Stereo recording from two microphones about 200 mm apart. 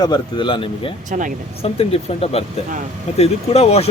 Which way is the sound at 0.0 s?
20° left (ahead or behind).